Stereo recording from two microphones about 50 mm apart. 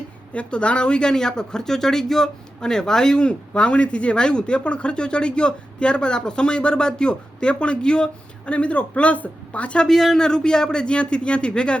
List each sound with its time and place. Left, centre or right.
0.3 s speech: left
9.8 s a man's voice: centre